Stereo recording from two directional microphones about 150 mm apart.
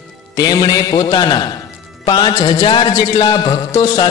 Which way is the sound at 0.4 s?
25° left (ahead or behind).